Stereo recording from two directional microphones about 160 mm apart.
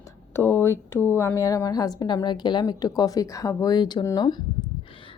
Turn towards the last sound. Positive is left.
turn(degrees=25)  # may be behind; listen again after turning